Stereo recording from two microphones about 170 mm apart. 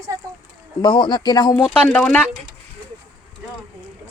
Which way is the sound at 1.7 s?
10° left (ahead or behind).